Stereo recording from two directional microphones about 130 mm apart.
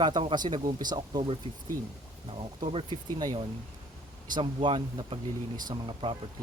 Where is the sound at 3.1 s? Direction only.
30° right (ahead or behind).